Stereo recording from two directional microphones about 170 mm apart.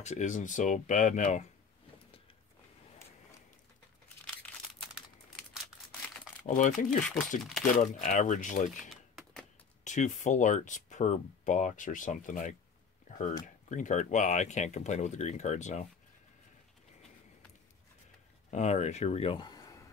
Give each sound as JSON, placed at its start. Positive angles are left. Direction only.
{"t": 0.0, "sound": "speech", "side_deg": 45}
{"t": 6.4, "sound": "speech", "side_deg": 50}
{"t": 8.9, "sound": "typing", "side_deg": 0}
{"t": 9.8, "sound": "speech", "side_deg": 45}
{"t": 13.7, "sound": "speech", "side_deg": 45}
{"t": 18.5, "sound": "speech", "side_deg": 40}